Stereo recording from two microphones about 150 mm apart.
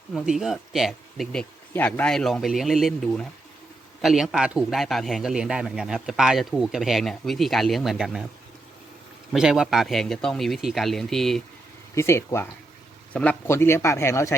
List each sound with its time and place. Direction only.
0.1 s a man's voice: 5° right (ahead or behind)
9.3 s a man's voice: 5° right (ahead or behind)
11.9 s speech: 15° left (ahead or behind)